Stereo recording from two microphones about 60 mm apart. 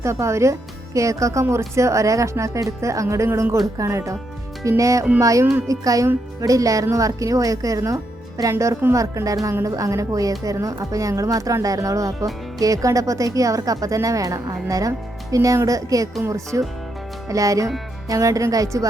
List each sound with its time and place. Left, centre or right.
0.0 s speech: right
16.3 s speech: right